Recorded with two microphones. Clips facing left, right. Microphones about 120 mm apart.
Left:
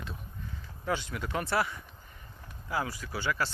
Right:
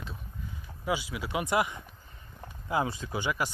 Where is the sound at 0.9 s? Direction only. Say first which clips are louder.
Right 1 dB; 10° right (ahead or behind).